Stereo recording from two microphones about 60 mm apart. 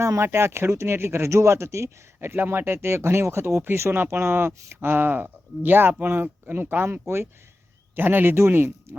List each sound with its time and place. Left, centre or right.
0.0 s speech: right
2.3 s speech: right